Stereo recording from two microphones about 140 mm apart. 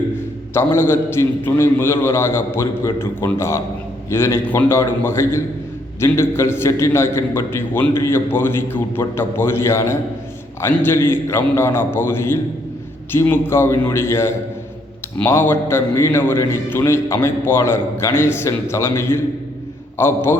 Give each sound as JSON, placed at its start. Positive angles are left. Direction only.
{"t": 0.5, "sound": "a man's voice", "side_deg": 15}